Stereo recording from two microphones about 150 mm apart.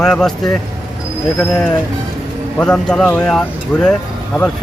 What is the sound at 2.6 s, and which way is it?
Speech, 5° left (ahead or behind).